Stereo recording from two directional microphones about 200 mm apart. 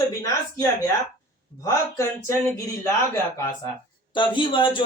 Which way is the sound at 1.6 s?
15° left (ahead or behind).